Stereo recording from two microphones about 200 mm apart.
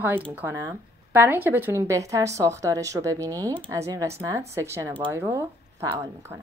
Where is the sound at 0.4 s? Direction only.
15° right (ahead or behind).